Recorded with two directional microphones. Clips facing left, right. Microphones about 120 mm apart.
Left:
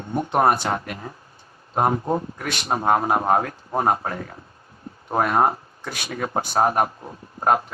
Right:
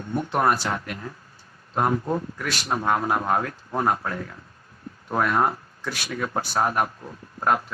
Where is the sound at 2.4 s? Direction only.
55° left (ahead or behind).